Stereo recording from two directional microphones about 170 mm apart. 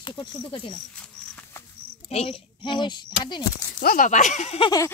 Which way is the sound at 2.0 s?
35° left (ahead or behind).